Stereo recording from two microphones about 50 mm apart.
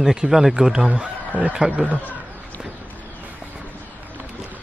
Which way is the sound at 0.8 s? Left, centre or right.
Right.